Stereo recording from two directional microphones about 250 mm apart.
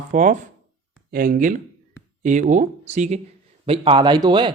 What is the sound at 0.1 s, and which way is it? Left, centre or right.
Speech, right.